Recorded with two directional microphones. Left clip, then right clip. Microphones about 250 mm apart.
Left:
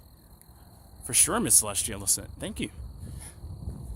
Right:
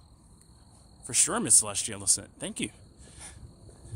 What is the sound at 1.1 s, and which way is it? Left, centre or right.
Speech, centre.